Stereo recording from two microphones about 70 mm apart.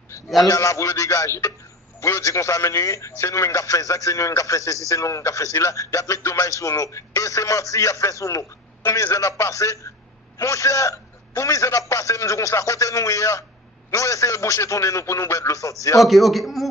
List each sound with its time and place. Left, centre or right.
0.4 s a man's voice: left
16.0 s a man's voice: centre